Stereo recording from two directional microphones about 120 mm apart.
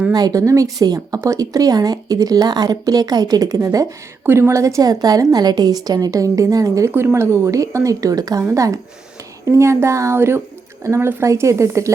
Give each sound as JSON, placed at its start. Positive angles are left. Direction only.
{"t": 0.1, "sound": "a woman's voice", "side_deg": -30}